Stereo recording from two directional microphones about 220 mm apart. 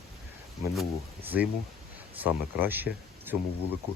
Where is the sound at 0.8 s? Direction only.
5° right (ahead or behind).